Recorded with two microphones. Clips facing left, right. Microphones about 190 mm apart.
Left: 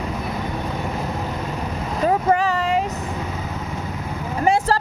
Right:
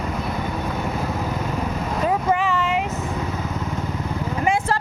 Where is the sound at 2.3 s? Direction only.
40° left (ahead or behind).